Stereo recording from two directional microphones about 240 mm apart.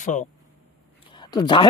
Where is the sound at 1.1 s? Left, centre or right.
Centre.